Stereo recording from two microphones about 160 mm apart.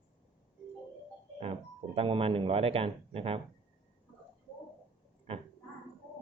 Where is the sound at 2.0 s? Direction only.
35° right (ahead or behind).